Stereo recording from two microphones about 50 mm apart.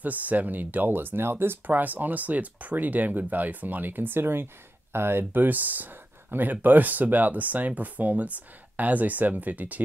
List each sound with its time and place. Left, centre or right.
0.0 s speech: right